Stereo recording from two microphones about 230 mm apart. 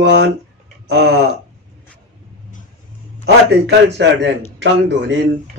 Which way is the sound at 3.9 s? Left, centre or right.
Right.